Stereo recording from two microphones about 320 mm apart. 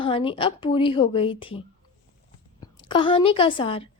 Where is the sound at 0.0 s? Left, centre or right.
Centre.